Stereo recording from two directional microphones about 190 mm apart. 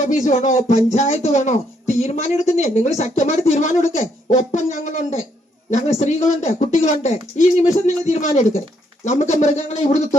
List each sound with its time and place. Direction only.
0.0 s speech: 40° left (ahead or behind)